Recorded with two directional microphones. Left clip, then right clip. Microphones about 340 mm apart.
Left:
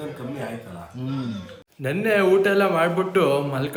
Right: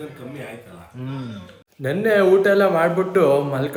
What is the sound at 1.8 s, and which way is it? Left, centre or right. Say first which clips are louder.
A man's voice: right 3 dB; centre.